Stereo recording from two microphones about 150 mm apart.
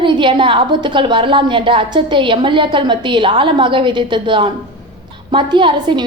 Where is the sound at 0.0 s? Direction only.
35° right (ahead or behind).